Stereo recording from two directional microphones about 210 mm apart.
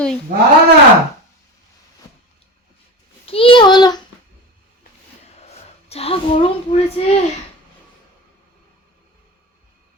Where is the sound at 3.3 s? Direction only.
25° left (ahead or behind).